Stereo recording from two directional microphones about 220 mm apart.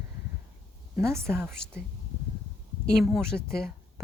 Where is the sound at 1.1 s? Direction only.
10° right (ahead or behind).